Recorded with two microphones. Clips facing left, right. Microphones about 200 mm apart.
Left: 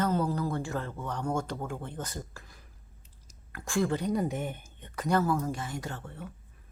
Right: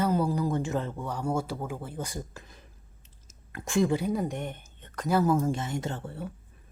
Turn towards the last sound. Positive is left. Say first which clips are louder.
# right 5 dB
turn(degrees=-30)  # may be behind; listen again after turning